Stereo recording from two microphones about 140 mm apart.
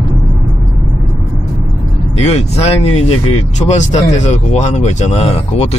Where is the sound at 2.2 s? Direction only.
50° left (ahead or behind).